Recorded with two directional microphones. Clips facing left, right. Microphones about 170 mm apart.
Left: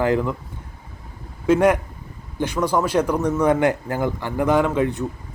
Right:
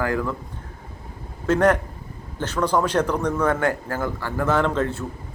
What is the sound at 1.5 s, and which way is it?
Speech, 10° left (ahead or behind).